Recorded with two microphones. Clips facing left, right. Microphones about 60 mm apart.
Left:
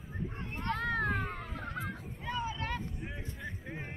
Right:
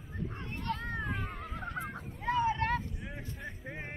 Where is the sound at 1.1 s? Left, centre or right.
Left.